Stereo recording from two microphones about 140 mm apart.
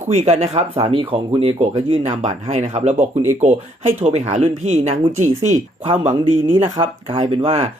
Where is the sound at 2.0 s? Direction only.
55° right (ahead or behind).